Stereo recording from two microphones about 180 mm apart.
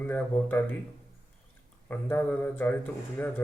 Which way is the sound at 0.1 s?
10° left (ahead or behind).